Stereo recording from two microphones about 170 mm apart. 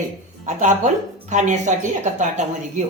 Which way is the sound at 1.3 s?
45° right (ahead or behind).